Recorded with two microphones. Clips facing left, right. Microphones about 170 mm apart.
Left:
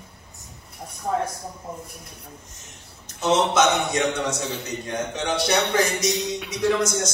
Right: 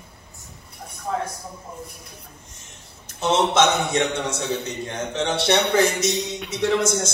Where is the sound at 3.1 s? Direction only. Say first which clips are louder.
Right 1 dB; 30° right (ahead or behind).